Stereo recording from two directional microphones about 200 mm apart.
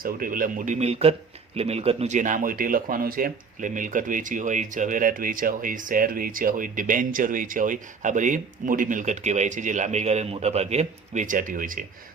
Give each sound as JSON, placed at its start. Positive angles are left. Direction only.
{"t": 0.0, "sound": "speech", "side_deg": -45}